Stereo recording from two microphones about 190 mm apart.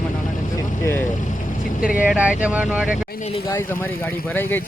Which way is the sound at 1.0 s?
40° left (ahead or behind).